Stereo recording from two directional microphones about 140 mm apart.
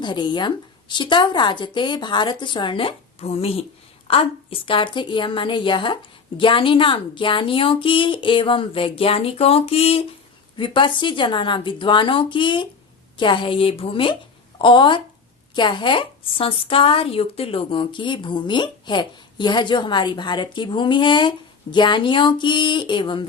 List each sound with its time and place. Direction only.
0.0 s speech: 35° left (ahead or behind)